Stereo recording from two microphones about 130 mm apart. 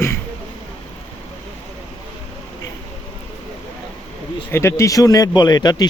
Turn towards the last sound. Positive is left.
turn(degrees=30)  # may be behind; listen again after turning